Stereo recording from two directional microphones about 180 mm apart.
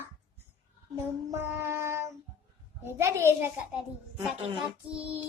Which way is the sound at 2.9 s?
15° right (ahead or behind).